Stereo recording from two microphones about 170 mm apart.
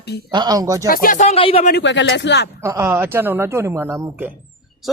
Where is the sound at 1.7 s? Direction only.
90° left.